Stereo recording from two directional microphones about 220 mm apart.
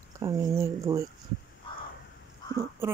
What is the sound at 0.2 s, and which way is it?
Speech, 15° right (ahead or behind).